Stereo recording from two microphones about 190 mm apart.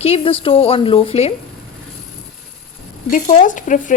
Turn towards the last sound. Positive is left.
turn(degrees=45)  # may be behind; listen again after turning